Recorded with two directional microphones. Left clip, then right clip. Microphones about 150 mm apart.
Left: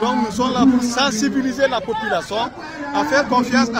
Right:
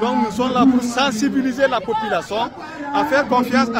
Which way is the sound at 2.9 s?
45° right (ahead or behind).